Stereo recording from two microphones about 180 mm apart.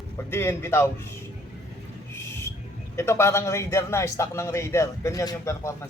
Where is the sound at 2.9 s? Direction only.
15° left (ahead or behind).